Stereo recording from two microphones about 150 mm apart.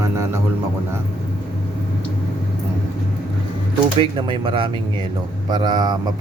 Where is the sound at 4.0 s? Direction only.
35° right (ahead or behind).